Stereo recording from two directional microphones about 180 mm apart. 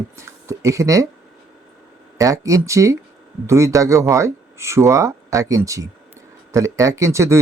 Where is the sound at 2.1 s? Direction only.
20° right (ahead or behind).